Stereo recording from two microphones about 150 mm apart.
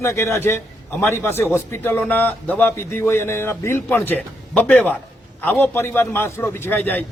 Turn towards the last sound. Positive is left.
turn(degrees=15)  # may be behind; listen again after turning